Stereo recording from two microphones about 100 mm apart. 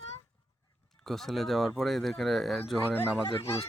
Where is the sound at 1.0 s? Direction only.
Centre (ahead or behind).